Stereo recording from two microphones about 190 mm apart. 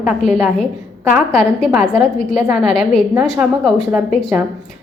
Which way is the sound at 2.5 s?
Centre (ahead or behind).